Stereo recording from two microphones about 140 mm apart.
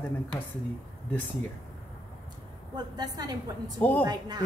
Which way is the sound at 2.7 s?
30° right (ahead or behind).